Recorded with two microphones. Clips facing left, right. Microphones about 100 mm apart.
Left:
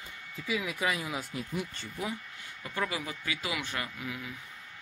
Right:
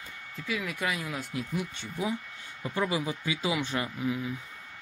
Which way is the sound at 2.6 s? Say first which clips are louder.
Right 5 dB; 25° right (ahead or behind).